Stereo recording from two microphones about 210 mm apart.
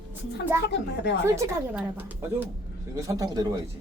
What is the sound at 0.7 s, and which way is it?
Speech, 55° left (ahead or behind).